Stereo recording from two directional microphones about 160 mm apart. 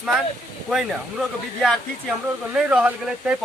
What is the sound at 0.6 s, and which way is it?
Speech, centre (ahead or behind).